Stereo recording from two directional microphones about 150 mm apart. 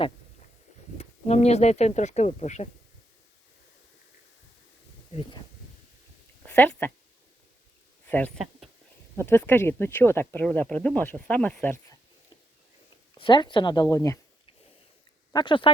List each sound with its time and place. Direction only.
0.9 s speech: 45° left (ahead or behind)
6.4 s speech: 10° left (ahead or behind)
9.1 s speech: 15° left (ahead or behind)
13.1 s speech: 30° left (ahead or behind)
15.3 s speech: 30° left (ahead or behind)